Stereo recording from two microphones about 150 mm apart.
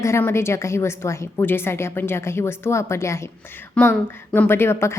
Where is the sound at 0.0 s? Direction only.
15° left (ahead or behind).